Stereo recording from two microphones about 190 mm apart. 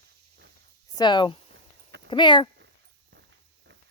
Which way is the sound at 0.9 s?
25° left (ahead or behind).